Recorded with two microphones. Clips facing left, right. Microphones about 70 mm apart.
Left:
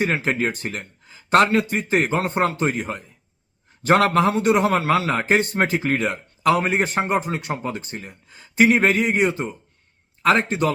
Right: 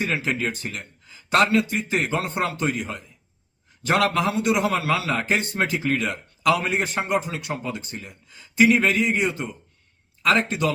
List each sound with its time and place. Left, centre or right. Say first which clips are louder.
0.0 s a man's voice: left 3 dB; left